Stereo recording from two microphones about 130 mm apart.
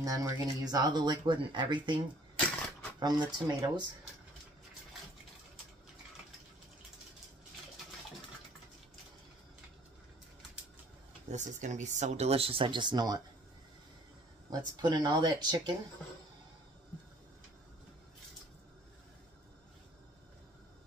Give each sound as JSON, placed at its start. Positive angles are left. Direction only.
{"t": 0.0, "sound": "speech", "side_deg": -25}
{"t": 3.0, "sound": "speech", "side_deg": -35}
{"t": 11.2, "sound": "speech", "side_deg": -65}
{"t": 14.5, "sound": "speech", "side_deg": -35}